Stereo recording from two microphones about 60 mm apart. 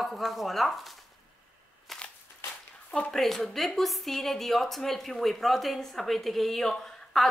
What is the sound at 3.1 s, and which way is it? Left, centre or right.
Speech, centre.